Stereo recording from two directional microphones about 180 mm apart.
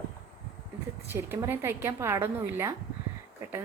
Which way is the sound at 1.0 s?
15° right (ahead or behind).